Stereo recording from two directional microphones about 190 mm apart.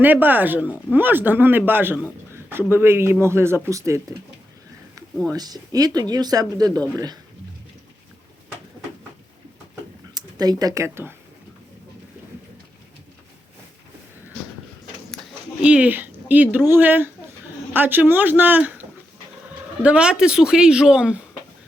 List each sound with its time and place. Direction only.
0.0 s a man's voice: 10° right (ahead or behind)
5.3 s speech: 20° right (ahead or behind)
10.2 s speech: 20° right (ahead or behind)
15.6 s a man's voice: 5° right (ahead or behind)